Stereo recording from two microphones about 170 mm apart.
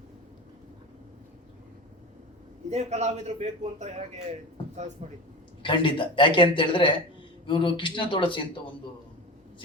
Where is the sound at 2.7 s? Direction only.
40° right (ahead or behind).